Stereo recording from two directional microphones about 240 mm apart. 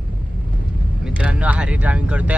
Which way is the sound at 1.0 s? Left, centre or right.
Centre.